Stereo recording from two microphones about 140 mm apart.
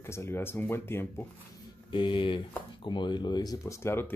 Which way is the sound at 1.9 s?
35° left (ahead or behind).